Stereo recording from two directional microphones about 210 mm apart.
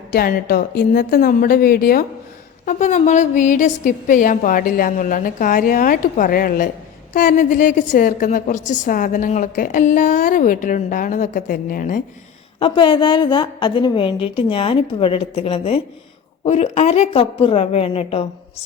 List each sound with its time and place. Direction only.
0.1 s a woman's voice: 45° left (ahead or behind)
12.5 s a woman's voice: 25° left (ahead or behind)